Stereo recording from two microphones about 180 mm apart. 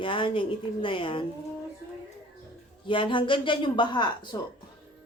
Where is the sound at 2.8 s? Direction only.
30° left (ahead or behind).